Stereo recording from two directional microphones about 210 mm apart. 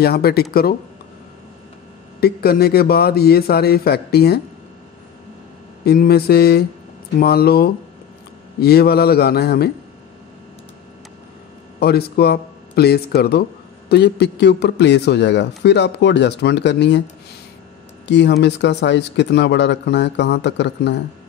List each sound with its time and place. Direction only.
0.0 s speech: 50° left (ahead or behind)
2.1 s speech: 50° left (ahead or behind)
5.9 s speech: 45° left (ahead or behind)
11.8 s speech: 50° left (ahead or behind)
18.0 s speech: 55° left (ahead or behind)